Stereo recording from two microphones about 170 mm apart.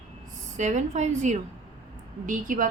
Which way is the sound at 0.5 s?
45° right (ahead or behind).